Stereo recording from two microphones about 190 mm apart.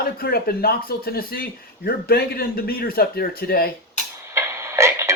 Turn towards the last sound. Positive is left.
turn(degrees=-15)  # may be behind; listen again after turning